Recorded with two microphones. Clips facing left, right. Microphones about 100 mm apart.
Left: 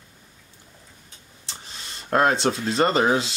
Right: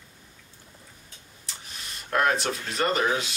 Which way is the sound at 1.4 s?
25° left (ahead or behind).